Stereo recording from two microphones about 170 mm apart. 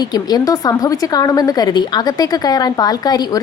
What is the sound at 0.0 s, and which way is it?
A woman's voice, 25° left (ahead or behind).